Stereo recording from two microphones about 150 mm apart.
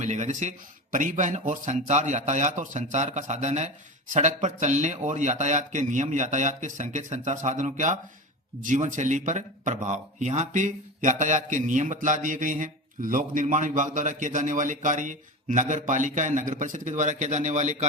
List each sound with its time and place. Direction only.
0.0 s a man's voice: 50° right (ahead or behind)